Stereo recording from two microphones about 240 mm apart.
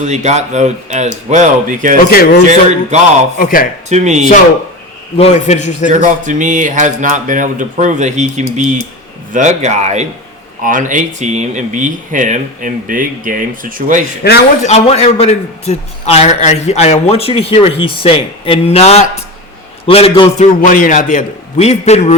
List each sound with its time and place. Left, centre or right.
0.0 s speech: right
2.0 s a man's voice: left
2.9 s speech: right
3.3 s a man's voice: left
3.8 s speech: right
5.1 s a man's voice: left
5.9 s speech: right
14.3 s a man's voice: left
14.7 s a man's voice: left
20.7 s a man's voice: left